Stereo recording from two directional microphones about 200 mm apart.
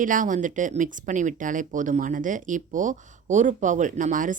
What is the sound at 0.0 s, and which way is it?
Speech, 40° right (ahead or behind).